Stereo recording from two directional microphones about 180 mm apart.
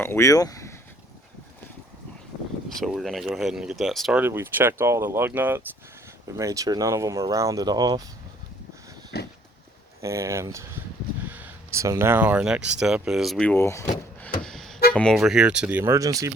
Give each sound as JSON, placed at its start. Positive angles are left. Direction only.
{"t": 0.0, "sound": "speech", "side_deg": 15}
{"t": 2.8, "sound": "speech", "side_deg": 0}
{"t": 4.2, "sound": "speech", "side_deg": -10}
{"t": 9.1, "sound": "a sound", "side_deg": 65}
{"t": 10.0, "sound": "speech", "side_deg": -15}
{"t": 13.5, "sound": "speech", "side_deg": 15}
{"t": 14.4, "sound": "harmonica", "side_deg": 0}
{"t": 14.9, "sound": "speech", "side_deg": 0}